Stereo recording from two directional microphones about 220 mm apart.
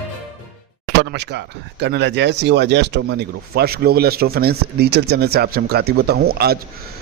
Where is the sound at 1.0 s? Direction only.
50° right (ahead or behind).